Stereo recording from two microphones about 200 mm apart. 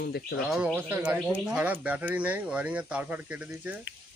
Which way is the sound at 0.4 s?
Centre (ahead or behind).